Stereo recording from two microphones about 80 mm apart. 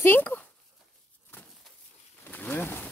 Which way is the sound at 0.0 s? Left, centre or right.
Left.